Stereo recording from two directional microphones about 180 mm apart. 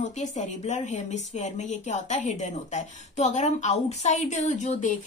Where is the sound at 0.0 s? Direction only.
40° left (ahead or behind).